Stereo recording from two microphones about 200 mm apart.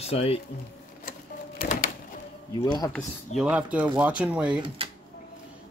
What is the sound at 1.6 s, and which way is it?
Printer, 45° left (ahead or behind).